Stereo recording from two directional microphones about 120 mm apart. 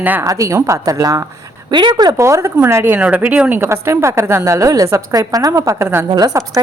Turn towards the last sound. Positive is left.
turn(degrees=-30)  # may be behind; listen again after turning